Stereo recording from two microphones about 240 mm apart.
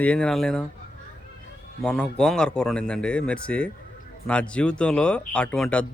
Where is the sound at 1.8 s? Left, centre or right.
Centre.